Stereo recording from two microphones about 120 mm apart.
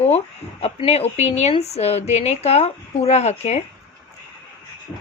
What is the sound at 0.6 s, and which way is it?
A woman's voice, 60° left (ahead or behind).